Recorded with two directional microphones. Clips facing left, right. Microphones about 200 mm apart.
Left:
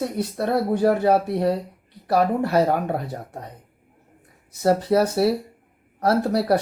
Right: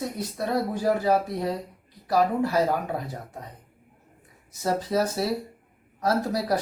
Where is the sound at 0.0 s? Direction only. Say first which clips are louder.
Left 5 dB; 65° left (ahead or behind).